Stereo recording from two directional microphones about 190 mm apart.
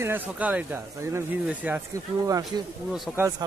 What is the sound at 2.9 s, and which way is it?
Speech, centre (ahead or behind).